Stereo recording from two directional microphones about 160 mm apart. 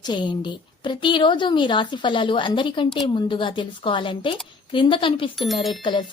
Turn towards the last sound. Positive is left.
turn(degrees=0)  # may be behind; listen again after turning